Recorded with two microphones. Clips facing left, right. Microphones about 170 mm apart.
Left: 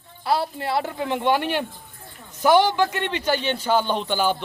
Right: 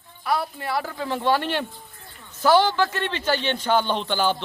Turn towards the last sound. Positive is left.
turn(degrees=10)  # may be behind; listen again after turning